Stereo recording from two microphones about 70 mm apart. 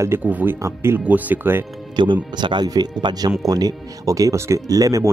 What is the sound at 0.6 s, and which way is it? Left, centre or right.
Speech, right.